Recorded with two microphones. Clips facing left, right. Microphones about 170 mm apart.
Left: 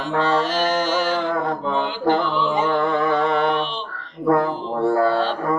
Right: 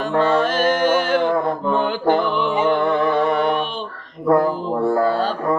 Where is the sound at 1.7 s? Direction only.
55° right (ahead or behind).